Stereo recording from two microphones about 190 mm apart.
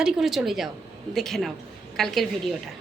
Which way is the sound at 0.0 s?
5° right (ahead or behind).